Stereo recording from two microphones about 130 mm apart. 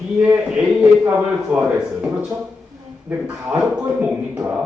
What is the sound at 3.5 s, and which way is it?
Speech, 10° right (ahead or behind).